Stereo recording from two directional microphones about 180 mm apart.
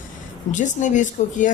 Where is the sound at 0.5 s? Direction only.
45° left (ahead or behind).